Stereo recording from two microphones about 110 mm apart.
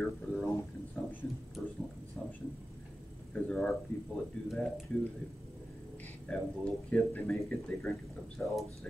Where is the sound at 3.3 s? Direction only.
5° left (ahead or behind).